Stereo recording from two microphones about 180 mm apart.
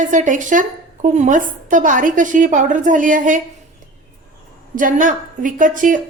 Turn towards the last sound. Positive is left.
turn(degrees=-45)  # may be behind; listen again after turning